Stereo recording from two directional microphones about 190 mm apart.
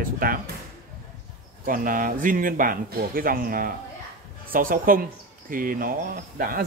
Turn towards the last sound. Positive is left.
turn(degrees=-45)  # may be behind; listen again after turning